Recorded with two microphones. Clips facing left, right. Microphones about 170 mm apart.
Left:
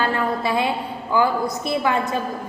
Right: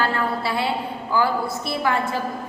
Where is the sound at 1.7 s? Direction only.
20° left (ahead or behind).